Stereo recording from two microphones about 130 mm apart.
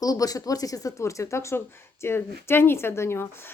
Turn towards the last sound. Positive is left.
turn(degrees=20)  # may be behind; listen again after turning